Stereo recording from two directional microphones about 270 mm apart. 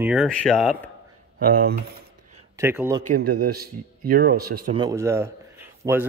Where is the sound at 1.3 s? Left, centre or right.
Right.